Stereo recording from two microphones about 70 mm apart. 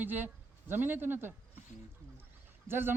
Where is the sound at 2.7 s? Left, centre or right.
Right.